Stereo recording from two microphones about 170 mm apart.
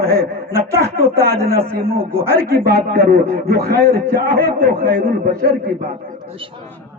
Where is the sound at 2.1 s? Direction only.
15° right (ahead or behind).